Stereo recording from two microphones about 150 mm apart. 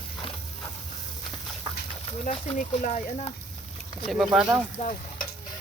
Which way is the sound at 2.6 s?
60° left (ahead or behind).